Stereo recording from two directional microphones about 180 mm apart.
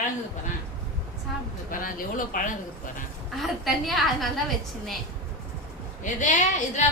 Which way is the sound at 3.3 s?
Centre (ahead or behind).